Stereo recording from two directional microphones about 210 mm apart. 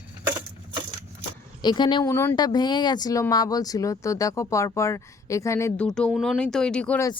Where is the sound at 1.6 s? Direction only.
20° left (ahead or behind).